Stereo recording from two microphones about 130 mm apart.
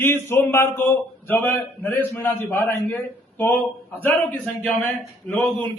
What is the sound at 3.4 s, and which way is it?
A man's voice, 15° left (ahead or behind).